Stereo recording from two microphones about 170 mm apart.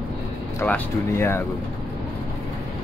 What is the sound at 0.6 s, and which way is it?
Speech, 15° left (ahead or behind).